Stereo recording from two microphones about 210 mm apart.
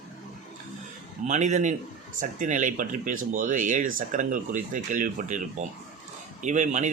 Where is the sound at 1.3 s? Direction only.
35° right (ahead or behind).